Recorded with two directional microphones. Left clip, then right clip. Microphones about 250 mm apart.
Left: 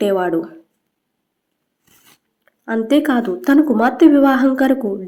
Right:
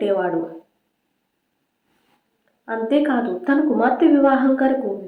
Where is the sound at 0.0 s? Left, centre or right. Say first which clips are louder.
Left 3 dB; left.